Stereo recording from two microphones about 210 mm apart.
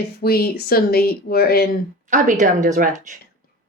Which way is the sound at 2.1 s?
35° right (ahead or behind).